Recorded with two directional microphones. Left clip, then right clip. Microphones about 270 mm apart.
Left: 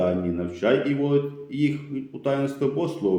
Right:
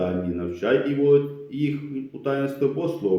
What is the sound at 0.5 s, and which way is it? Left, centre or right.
Speech, left.